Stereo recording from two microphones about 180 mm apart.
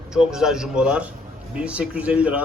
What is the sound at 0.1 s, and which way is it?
A man's voice, 5° right (ahead or behind).